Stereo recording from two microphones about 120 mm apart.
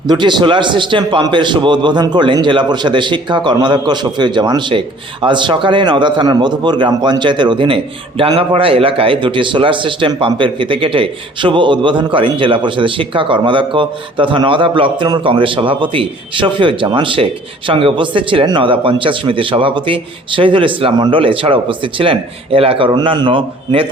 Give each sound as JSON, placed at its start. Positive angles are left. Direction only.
{"t": 0.1, "sound": "a man's voice", "side_deg": -40}
{"t": 23.0, "sound": "speech", "side_deg": -40}